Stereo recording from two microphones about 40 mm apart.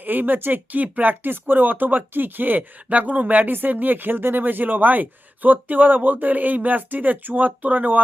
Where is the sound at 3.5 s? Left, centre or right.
Right.